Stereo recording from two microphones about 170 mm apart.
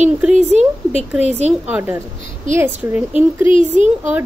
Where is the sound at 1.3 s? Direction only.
40° right (ahead or behind).